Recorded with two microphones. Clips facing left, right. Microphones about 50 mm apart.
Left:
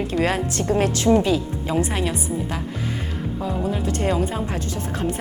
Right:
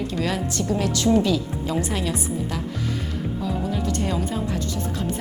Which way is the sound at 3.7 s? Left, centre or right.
Left.